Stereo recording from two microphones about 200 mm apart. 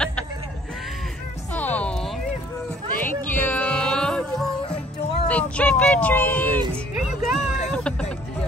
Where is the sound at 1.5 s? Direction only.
10° left (ahead or behind).